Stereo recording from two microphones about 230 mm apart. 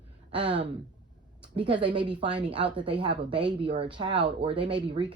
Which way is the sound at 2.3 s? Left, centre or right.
Centre.